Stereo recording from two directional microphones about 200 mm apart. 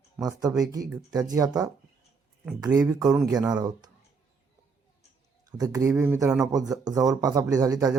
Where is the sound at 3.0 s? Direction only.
Centre (ahead or behind).